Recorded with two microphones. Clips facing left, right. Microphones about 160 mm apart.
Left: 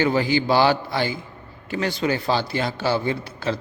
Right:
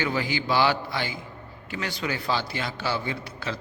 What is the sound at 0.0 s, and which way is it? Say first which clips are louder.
A man's voice: left 7 dB; 30° left (ahead or behind).